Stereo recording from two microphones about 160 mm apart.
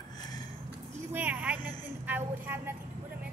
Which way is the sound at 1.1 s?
10° right (ahead or behind).